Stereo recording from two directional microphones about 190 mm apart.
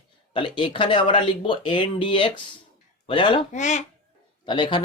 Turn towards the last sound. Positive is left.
turn(degrees=25)  # may be behind; listen again after turning